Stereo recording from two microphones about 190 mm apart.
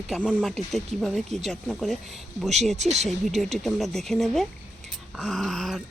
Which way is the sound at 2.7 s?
35° right (ahead or behind).